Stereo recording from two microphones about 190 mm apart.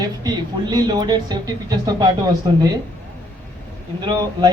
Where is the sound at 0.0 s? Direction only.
20° right (ahead or behind).